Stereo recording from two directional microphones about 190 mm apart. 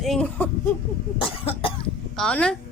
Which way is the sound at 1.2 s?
30° left (ahead or behind).